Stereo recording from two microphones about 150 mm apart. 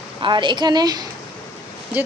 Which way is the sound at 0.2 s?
30° right (ahead or behind).